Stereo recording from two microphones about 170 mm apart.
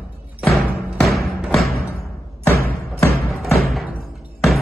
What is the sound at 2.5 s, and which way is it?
Music, 60° right (ahead or behind).